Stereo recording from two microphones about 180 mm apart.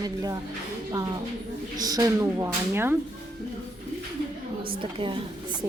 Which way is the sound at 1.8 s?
20° right (ahead or behind).